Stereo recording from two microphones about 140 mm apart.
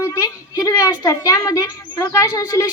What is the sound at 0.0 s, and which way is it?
Speech, 25° left (ahead or behind).